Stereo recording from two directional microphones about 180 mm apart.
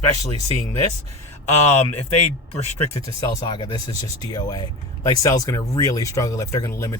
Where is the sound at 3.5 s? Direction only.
25° left (ahead or behind).